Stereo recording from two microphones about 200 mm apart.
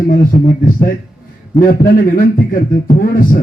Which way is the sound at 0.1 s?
40° left (ahead or behind).